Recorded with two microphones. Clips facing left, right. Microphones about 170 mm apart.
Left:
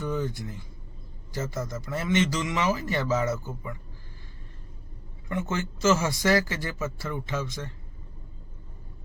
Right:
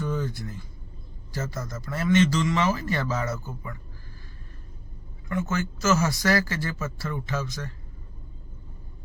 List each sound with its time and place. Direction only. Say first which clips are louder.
0.0 s a sound: even; 20° left (ahead or behind)
1.3 s speech: left 1 dB; 20° left (ahead or behind)
5.3 s speech: right 2 dB; 25° left (ahead or behind)